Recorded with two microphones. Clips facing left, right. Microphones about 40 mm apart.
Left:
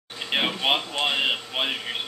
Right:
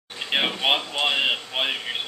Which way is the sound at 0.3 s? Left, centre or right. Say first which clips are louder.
Right 1 dB; centre.